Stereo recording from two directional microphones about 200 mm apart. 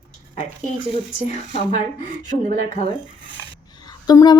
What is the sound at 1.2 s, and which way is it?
Speech, 30° left (ahead or behind).